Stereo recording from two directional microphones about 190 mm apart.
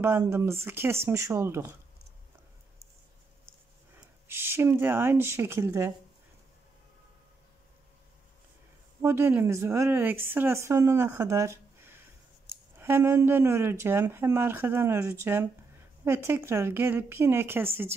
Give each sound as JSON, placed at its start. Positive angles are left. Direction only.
{"t": 0.0, "sound": "speech", "side_deg": -15}
{"t": 4.3, "sound": "speech", "side_deg": -10}
{"t": 9.0, "sound": "speech", "side_deg": -15}